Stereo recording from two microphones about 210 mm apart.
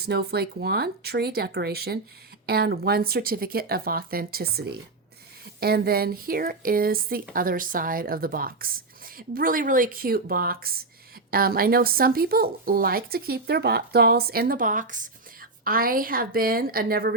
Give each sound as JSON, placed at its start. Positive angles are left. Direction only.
{"t": 0.0, "sound": "speech", "side_deg": -50}